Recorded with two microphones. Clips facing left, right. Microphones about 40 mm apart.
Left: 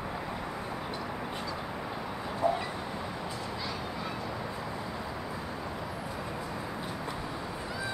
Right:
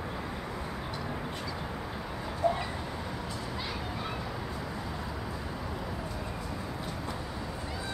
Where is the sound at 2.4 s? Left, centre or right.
Centre.